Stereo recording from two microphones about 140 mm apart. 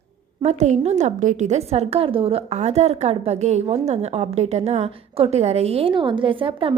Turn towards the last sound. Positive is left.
turn(degrees=-40)  # may be behind; listen again after turning